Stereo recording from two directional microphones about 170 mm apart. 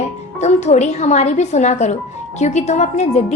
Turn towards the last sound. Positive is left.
turn(degrees=40)  # may be behind; listen again after turning